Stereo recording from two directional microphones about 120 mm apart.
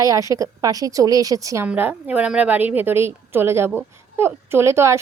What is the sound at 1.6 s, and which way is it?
A woman's voice, 10° right (ahead or behind).